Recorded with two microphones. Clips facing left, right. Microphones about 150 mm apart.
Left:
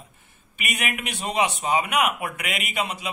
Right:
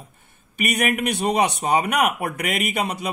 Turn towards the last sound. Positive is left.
turn(degrees=-45)  # may be behind; listen again after turning